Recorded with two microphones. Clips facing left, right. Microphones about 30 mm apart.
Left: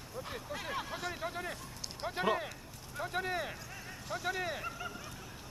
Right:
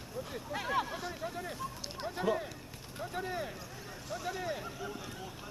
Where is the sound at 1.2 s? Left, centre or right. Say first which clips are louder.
Left 1 dB; left.